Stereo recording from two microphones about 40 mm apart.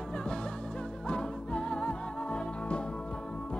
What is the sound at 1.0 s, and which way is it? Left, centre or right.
Music, left.